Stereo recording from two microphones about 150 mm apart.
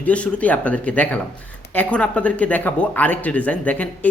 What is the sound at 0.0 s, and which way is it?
Speech, 10° left (ahead or behind).